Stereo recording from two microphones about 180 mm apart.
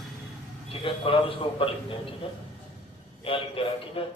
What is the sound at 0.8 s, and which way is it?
A man's voice, 30° left (ahead or behind).